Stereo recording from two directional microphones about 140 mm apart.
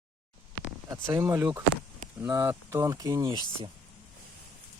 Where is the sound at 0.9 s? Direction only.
20° right (ahead or behind).